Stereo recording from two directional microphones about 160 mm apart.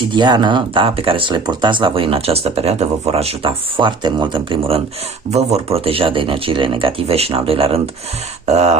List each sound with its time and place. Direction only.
0.1 s speech: 30° right (ahead or behind)
5.7 s speech: 35° right (ahead or behind)